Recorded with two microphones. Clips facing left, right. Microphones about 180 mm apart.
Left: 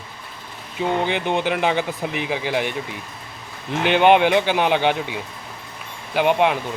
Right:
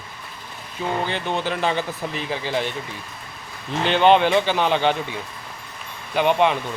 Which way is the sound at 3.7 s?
15° left (ahead or behind).